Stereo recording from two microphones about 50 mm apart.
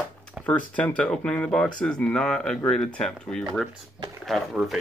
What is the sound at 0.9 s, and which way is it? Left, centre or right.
Speech, left.